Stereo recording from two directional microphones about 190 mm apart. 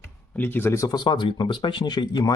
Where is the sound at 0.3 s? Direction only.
10° left (ahead or behind).